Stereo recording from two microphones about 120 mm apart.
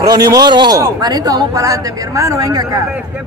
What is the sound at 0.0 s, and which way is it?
A man's voice, 30° right (ahead or behind).